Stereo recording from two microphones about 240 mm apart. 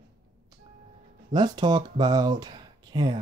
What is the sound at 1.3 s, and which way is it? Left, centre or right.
Speech, centre.